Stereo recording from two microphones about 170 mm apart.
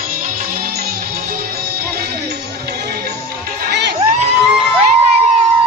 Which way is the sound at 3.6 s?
80° right.